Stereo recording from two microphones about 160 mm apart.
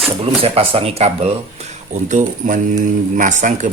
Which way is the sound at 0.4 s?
35° right (ahead or behind).